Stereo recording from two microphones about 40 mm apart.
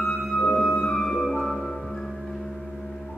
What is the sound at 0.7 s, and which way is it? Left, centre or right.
Music, centre.